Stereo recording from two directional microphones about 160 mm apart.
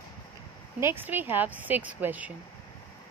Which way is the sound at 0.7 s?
15° right (ahead or behind).